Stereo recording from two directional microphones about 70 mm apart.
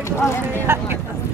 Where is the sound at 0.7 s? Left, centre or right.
Right.